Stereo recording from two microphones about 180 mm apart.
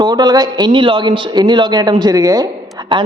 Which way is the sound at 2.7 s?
25° right (ahead or behind).